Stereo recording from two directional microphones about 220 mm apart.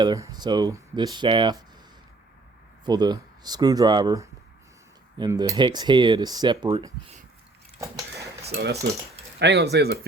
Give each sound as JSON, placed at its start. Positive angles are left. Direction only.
{"t": 0.0, "sound": "speech", "side_deg": -20}
{"t": 2.8, "sound": "speech", "side_deg": -20}
{"t": 8.4, "sound": "speech", "side_deg": -50}